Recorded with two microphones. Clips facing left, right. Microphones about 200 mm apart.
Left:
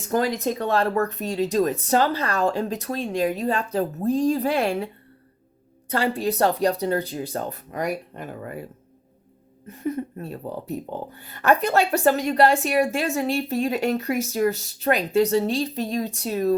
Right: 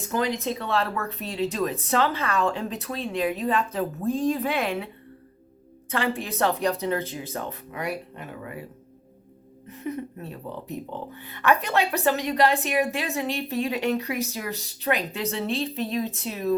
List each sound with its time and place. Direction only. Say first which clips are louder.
0.1 s speech: left 4 dB; 45° left (ahead or behind)
5.9 s speech: left 4 dB; 35° left (ahead or behind)
9.6 s speech: left 4 dB; 45° left (ahead or behind)